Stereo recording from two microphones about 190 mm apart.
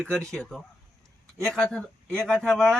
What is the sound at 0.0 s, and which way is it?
Speech, 5° left (ahead or behind).